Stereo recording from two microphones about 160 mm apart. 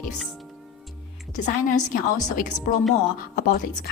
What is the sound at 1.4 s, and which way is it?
Speech, 50° left (ahead or behind).